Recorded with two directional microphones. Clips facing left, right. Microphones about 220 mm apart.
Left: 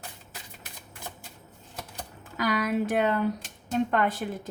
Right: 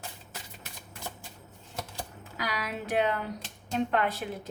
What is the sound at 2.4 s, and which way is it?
A woman's voice, 50° left (ahead or behind).